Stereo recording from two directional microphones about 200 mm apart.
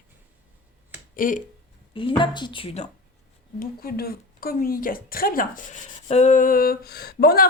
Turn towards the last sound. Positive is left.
turn(degrees=50)  # may be behind; listen again after turning